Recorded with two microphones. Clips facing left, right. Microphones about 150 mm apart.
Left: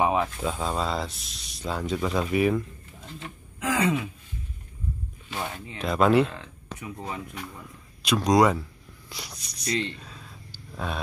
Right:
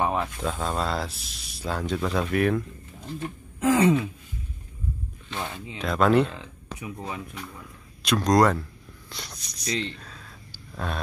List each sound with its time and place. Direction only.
0.0 s speech: 5° left (ahead or behind)
3.6 s speech: 30° right (ahead or behind)
5.3 s speech: 10° left (ahead or behind)
9.1 s a sound: 5° left (ahead or behind)
10.8 s speech: 5° left (ahead or behind)